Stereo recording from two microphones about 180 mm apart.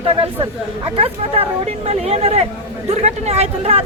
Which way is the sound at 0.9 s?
35° right (ahead or behind).